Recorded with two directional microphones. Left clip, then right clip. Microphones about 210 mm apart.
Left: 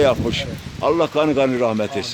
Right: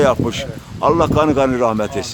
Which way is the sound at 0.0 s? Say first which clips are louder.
Right 2 dB; 5° right (ahead or behind).